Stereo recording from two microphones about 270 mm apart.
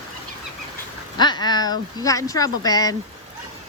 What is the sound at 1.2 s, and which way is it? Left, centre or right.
Speech, centre.